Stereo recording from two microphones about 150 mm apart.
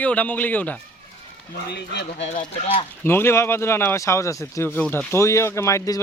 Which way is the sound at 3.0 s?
15° left (ahead or behind).